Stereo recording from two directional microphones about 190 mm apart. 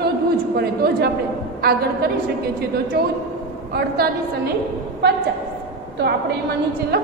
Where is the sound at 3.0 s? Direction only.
55° right (ahead or behind).